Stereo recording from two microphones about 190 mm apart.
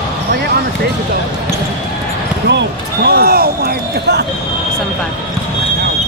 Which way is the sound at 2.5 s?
60° right (ahead or behind).